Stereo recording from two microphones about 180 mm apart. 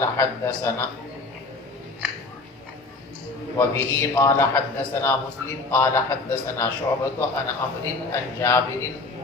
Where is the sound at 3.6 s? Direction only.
15° left (ahead or behind).